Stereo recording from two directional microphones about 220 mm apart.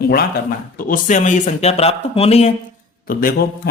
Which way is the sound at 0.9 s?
35° left (ahead or behind).